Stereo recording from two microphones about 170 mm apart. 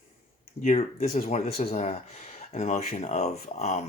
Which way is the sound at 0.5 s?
45° left (ahead or behind).